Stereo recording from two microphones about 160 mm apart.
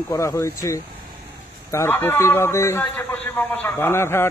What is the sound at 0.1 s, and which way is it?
A man's voice, 20° left (ahead or behind).